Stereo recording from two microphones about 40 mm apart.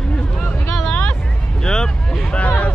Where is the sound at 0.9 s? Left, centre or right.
Left.